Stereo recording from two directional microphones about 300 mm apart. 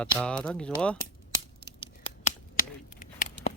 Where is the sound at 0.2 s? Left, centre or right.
Centre.